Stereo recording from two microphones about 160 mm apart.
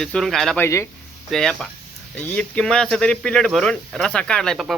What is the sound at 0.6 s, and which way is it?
Speech, 20° left (ahead or behind).